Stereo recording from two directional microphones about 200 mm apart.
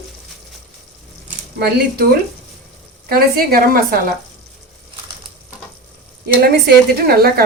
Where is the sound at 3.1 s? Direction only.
50° right (ahead or behind).